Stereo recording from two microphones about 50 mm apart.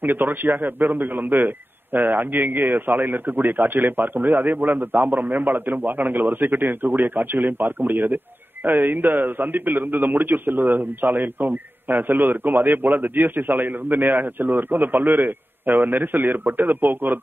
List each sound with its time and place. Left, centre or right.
0.0 s a man's voice: right